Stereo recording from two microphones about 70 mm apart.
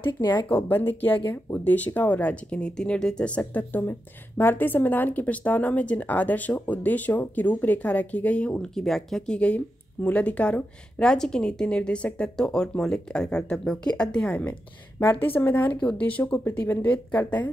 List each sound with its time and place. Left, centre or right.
0.5 s a woman's voice: left